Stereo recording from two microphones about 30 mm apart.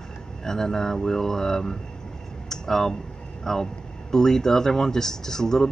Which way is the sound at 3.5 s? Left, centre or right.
Centre.